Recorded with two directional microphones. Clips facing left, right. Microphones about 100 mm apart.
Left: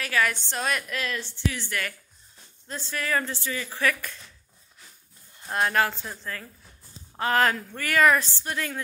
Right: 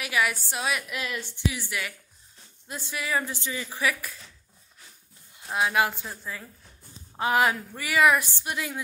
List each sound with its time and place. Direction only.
0.0 s a woman's voice: 10° right (ahead or behind)
5.5 s a woman's voice: 5° right (ahead or behind)